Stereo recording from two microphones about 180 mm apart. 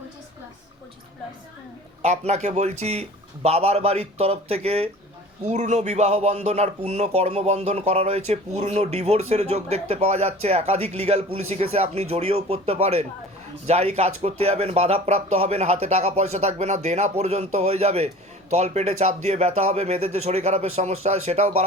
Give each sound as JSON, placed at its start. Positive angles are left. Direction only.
{"t": 2.0, "sound": "speech", "side_deg": -40}